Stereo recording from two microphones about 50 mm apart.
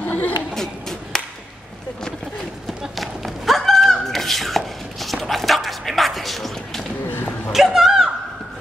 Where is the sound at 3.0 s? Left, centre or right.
Centre.